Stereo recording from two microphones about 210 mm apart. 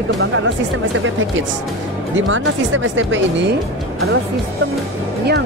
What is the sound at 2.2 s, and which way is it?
Speech, 65° right (ahead or behind).